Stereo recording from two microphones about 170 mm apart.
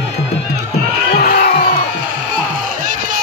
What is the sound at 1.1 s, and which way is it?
Crowd, 60° left (ahead or behind).